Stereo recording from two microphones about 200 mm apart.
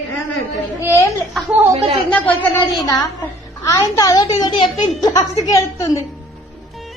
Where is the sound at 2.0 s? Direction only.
10° left (ahead or behind).